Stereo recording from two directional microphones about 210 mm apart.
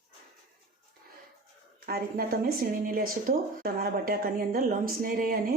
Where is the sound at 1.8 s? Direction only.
45° right (ahead or behind).